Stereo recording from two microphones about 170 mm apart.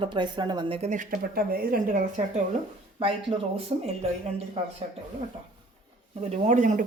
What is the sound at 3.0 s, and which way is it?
Speech, 30° right (ahead or behind).